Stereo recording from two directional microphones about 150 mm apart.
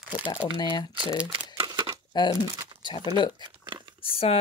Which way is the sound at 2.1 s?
30° left (ahead or behind).